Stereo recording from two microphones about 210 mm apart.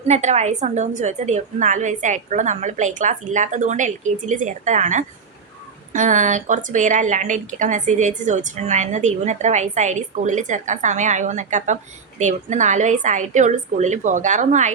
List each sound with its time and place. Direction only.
0.1 s a woman's voice: 35° right (ahead or behind)